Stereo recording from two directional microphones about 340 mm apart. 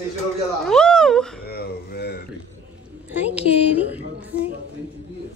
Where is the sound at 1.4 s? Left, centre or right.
Left.